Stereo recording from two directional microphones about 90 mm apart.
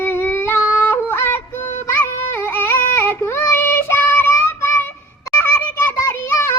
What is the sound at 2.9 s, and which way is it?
Child singing, 30° left (ahead or behind).